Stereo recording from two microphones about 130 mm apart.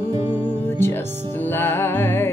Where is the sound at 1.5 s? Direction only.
15° left (ahead or behind).